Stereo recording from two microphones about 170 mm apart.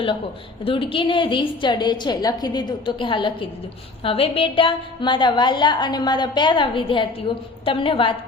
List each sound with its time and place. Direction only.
0.6 s a woman's voice: 30° left (ahead or behind)